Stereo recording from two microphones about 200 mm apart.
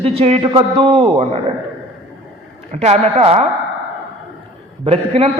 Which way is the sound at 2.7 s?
35° right (ahead or behind).